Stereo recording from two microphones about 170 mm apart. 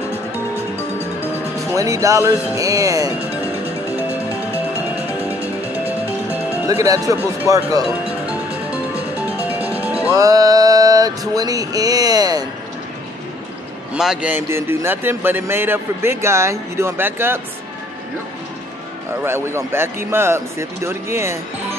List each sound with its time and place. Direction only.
1.8 s speech: 20° right (ahead or behind)
6.7 s speech: 20° right (ahead or behind)
9.5 s music: 10° right (ahead or behind)
10.1 s a sound: 20° right (ahead or behind)
13.9 s speech: 5° right (ahead or behind)
19.2 s speech: 15° right (ahead or behind)